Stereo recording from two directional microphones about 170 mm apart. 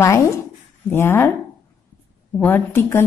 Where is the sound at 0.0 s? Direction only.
15° left (ahead or behind).